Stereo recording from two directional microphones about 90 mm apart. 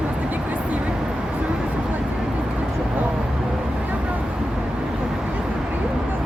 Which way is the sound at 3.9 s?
20° right (ahead or behind).